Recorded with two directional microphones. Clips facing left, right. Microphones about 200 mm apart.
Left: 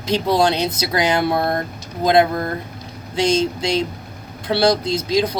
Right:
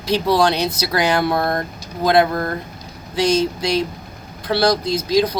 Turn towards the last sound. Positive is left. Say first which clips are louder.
# right 2 dB
turn(degrees=25)  # may be behind; listen again after turning